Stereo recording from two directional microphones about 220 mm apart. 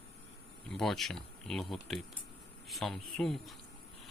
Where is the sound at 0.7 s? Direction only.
Centre (ahead or behind).